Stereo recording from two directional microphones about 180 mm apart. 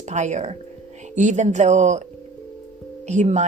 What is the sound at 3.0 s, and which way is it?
Speech, 40° right (ahead or behind).